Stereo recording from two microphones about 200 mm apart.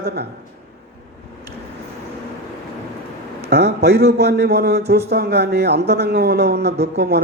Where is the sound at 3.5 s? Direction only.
55° right (ahead or behind).